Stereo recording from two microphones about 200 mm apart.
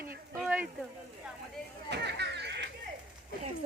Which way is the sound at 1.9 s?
55° right (ahead or behind).